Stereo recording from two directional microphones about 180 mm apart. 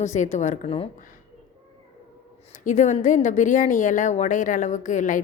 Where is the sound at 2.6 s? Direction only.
45° left (ahead or behind).